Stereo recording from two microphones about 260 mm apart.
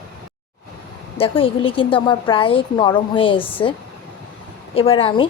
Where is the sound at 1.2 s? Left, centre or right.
Left.